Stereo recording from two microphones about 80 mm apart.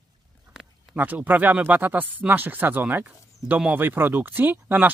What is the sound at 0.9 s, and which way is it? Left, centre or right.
Speech, centre.